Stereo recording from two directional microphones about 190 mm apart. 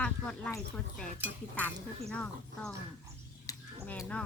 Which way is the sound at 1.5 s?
5° left (ahead or behind).